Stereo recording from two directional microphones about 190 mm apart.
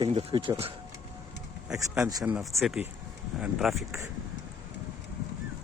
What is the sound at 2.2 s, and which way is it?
Speech, 5° right (ahead or behind).